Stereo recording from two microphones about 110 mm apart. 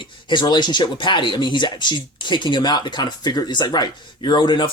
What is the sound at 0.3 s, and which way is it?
Speech, 45° left (ahead or behind).